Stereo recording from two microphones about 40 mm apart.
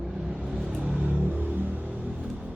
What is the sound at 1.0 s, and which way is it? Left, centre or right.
Music, right.